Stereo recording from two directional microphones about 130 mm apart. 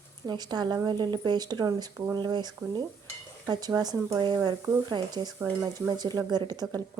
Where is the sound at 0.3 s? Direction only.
35° right (ahead or behind).